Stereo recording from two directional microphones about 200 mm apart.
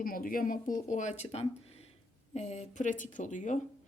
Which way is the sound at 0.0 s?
45° left (ahead or behind).